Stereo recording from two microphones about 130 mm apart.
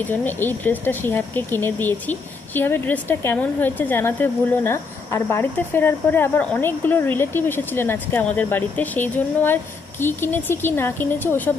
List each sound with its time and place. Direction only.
0.1 s speech: 15° left (ahead or behind)